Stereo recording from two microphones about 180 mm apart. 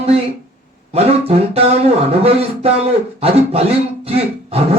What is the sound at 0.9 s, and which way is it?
Speech, 35° right (ahead or behind).